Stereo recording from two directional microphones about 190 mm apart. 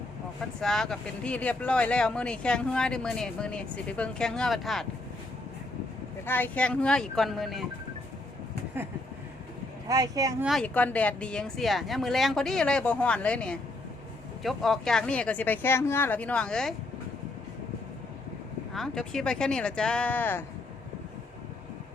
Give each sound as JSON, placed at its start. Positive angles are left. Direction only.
{"t": 0.6, "sound": "speech", "side_deg": 0}
{"t": 6.2, "sound": "speech", "side_deg": 10}
{"t": 9.9, "sound": "speech", "side_deg": -20}
{"t": 10.4, "sound": "speech", "side_deg": 0}
{"t": 18.7, "sound": "speech", "side_deg": 0}